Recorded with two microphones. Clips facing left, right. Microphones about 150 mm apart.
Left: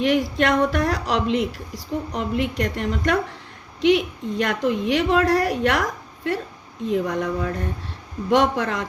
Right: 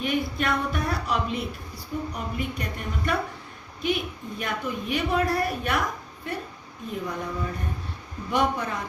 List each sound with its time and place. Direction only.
0.0 s a woman's voice: 90° left